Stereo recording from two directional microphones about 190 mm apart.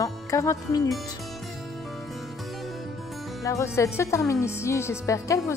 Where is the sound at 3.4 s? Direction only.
15° left (ahead or behind).